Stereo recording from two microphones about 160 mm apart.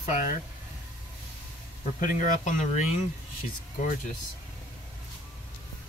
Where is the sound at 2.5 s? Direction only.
50° left (ahead or behind).